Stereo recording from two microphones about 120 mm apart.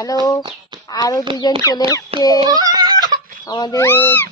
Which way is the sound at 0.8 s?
30° left (ahead or behind).